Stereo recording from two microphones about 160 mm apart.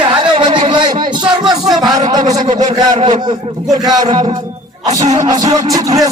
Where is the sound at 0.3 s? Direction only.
30° right (ahead or behind).